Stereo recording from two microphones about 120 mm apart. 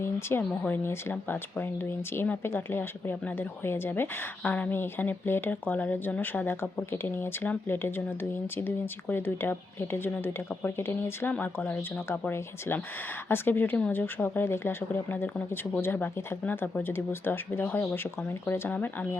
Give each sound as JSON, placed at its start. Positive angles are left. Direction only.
{"t": 0.0, "sound": "a woman's voice", "side_deg": 20}